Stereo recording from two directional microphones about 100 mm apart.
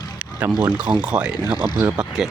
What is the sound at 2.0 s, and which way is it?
Speech, 10° right (ahead or behind).